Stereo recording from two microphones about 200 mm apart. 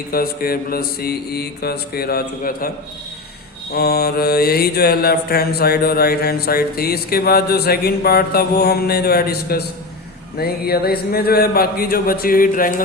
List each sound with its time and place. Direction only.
0.1 s mantra: 50° left (ahead or behind)